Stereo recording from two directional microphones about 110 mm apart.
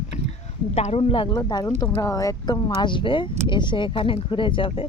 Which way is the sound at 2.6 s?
45° left (ahead or behind).